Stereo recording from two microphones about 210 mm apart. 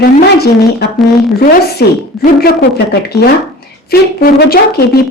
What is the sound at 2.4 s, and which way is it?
Speech, 50° left (ahead or behind).